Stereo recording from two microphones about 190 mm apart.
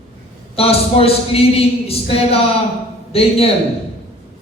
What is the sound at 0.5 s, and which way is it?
Speech, 30° left (ahead or behind).